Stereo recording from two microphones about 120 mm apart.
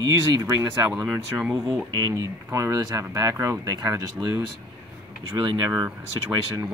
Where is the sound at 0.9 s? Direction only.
10° right (ahead or behind).